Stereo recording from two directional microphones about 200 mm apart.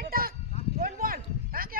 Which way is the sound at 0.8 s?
45° right (ahead or behind).